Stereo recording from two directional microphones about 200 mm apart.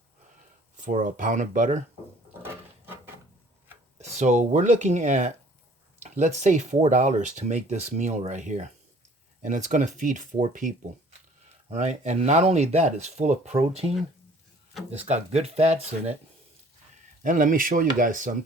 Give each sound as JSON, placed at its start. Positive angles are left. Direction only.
{"t": 0.8, "sound": "speech", "side_deg": -40}
{"t": 2.4, "sound": "a sound", "side_deg": -10}
{"t": 3.9, "sound": "speech", "side_deg": -35}
{"t": 14.8, "sound": "speech", "side_deg": -30}
{"t": 17.2, "sound": "speech", "side_deg": -40}